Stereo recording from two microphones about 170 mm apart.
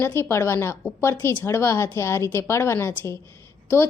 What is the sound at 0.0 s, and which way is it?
A woman's voice, 15° left (ahead or behind).